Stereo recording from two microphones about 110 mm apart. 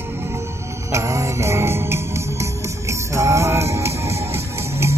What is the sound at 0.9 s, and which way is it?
Music, 25° right (ahead or behind).